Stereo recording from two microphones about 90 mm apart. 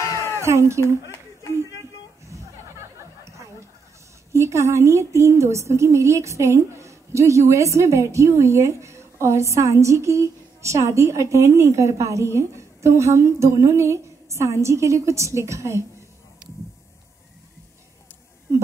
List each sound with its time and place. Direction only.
0.0 s cat: 35° left (ahead or behind)
0.4 s a woman's voice: 30° right (ahead or behind)
4.3 s a woman's voice: 35° right (ahead or behind)